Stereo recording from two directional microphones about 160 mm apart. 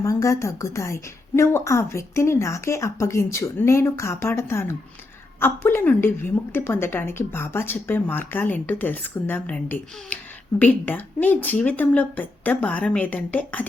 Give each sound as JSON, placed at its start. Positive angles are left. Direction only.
{"t": 0.0, "sound": "a woman's voice", "side_deg": 20}